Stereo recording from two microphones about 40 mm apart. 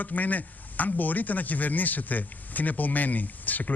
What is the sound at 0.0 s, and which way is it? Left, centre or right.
Speech, left.